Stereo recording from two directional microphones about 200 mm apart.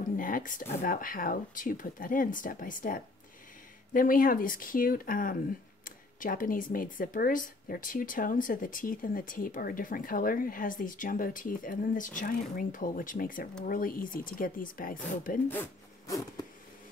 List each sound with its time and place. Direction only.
0.2 s speech: 40° left (ahead or behind)
15.4 s speech: 10° left (ahead or behind)